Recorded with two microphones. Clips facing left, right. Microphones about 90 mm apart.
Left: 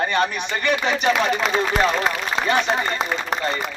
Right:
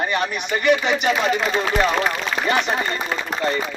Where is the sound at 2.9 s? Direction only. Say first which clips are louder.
Left 1 dB; 85° left.